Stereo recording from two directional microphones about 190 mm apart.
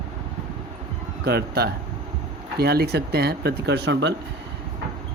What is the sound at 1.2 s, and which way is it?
Speech, 55° right (ahead or behind).